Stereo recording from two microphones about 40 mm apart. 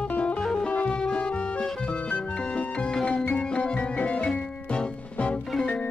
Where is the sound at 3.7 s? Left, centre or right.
Left.